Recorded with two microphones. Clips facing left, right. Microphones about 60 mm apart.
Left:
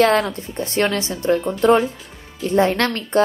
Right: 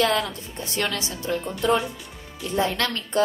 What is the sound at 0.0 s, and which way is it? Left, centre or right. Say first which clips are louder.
A woman's voice: left 7 dB; left.